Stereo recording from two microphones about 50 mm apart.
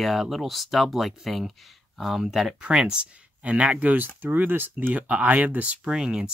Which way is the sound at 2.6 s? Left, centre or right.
Centre.